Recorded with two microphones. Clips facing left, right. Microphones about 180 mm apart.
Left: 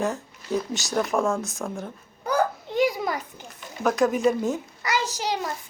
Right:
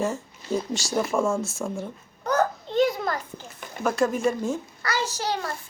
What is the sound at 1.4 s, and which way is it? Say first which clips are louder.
Speech: right 2 dB; 15° left (ahead or behind).